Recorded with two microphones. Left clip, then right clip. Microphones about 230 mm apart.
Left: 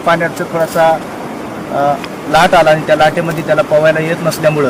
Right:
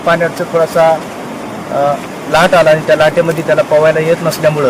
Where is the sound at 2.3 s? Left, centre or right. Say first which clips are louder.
Even; centre.